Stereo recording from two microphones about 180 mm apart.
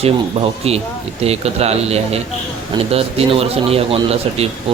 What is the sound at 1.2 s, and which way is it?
Speech, 35° right (ahead or behind).